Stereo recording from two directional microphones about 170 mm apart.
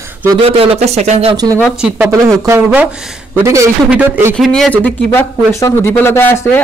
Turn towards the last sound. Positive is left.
turn(degrees=15)  # may be behind; listen again after turning